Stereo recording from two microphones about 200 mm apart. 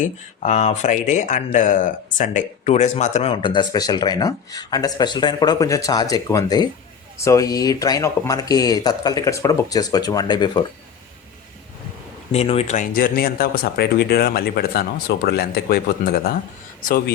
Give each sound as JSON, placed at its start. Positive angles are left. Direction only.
{"t": 0.0, "sound": "speech", "side_deg": 35}
{"t": 12.3, "sound": "speech", "side_deg": 30}